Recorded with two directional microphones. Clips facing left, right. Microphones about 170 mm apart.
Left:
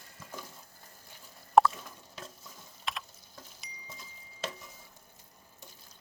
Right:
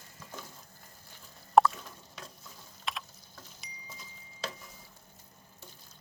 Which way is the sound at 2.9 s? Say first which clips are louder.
Even; centre (ahead or behind).